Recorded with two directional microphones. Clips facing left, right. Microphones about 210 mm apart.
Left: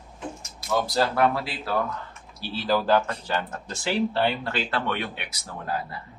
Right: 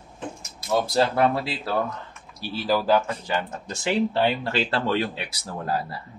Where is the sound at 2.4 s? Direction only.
10° right (ahead or behind).